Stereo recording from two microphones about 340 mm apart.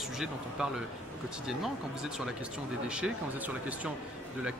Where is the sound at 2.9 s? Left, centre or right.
Centre.